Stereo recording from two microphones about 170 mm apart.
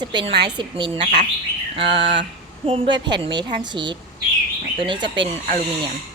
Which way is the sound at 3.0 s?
25° right (ahead or behind).